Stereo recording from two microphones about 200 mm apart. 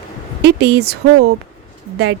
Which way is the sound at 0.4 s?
55° right (ahead or behind).